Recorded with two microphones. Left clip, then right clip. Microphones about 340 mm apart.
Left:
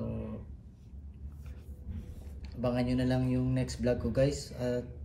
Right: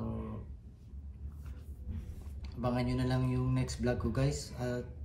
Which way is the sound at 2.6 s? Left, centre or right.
Centre.